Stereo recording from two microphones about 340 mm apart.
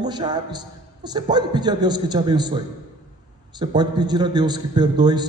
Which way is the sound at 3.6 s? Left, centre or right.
Centre.